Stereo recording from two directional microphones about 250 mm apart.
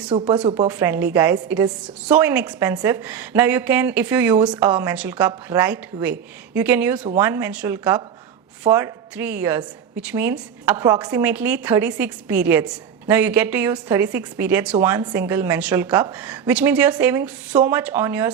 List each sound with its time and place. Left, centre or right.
0.1 s speech: right
0.7 s a woman's voice: centre